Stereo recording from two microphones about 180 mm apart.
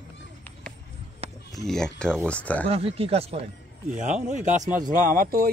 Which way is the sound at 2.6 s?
35° right (ahead or behind).